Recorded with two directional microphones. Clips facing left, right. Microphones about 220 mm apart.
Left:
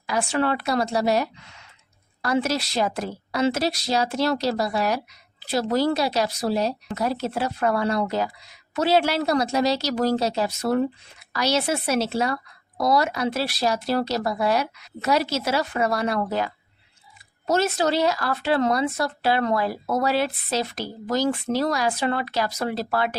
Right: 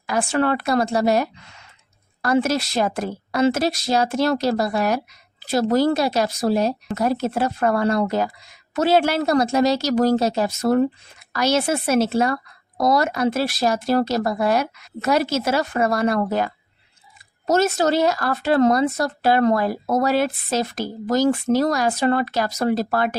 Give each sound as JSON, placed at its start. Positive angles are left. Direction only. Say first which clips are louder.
{"t": 0.1, "sound": "speech", "louder": "right 3 dB", "side_deg": -50}